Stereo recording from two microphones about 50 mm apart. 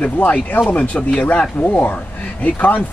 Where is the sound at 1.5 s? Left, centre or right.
Left.